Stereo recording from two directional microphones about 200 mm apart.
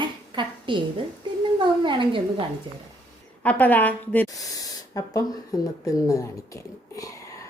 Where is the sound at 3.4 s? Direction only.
10° left (ahead or behind).